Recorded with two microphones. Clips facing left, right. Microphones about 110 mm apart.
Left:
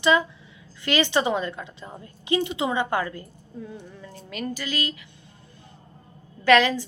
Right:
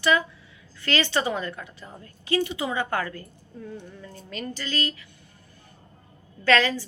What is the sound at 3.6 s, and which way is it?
Speech, 5° left (ahead or behind).